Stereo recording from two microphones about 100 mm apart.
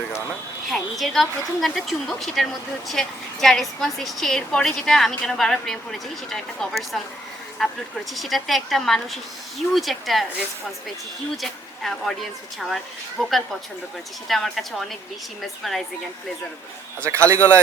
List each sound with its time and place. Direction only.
0.7 s a woman's voice: centre (ahead or behind)
17.2 s speech: 25° right (ahead or behind)